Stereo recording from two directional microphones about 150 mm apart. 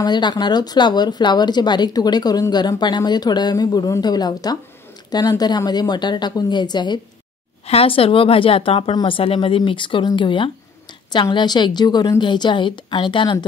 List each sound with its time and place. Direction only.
0.0 s speech: 30° left (ahead or behind)
7.6 s a woman's voice: 40° left (ahead or behind)